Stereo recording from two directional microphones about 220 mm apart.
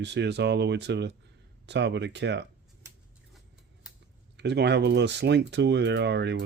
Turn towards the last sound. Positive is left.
turn(degrees=-50)  # may be behind; listen again after turning